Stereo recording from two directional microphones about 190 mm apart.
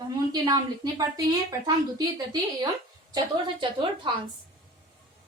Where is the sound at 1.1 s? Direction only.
20° right (ahead or behind).